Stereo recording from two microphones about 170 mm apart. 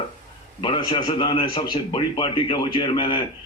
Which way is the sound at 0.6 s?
30° left (ahead or behind).